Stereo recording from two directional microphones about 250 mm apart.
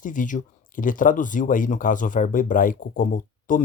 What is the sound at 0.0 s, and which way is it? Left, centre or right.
Speech, left.